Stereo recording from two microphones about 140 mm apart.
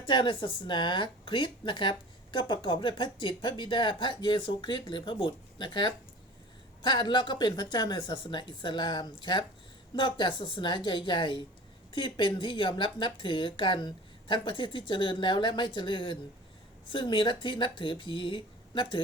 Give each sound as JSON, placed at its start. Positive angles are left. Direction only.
{"t": 0.0, "sound": "a woman's voice", "side_deg": 35}